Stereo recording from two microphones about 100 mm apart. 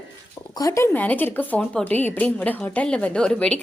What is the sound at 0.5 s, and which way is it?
Speech, 30° left (ahead or behind).